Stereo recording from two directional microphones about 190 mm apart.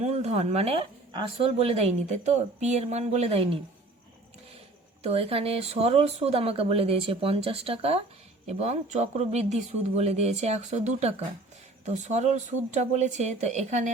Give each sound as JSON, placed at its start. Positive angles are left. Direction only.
{"t": 0.0, "sound": "a woman's voice", "side_deg": -35}
{"t": 5.0, "sound": "a woman's voice", "side_deg": -30}